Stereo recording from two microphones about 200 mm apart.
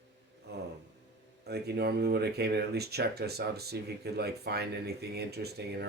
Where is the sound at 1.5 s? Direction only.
55° right (ahead or behind).